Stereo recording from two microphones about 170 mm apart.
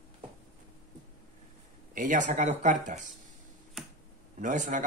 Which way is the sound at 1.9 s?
50° right (ahead or behind).